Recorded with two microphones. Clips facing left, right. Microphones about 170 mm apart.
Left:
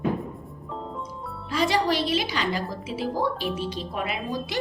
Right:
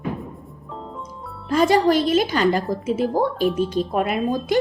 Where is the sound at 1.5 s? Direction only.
50° right (ahead or behind).